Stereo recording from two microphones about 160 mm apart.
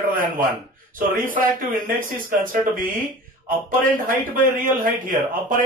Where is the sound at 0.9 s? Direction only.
60° right (ahead or behind).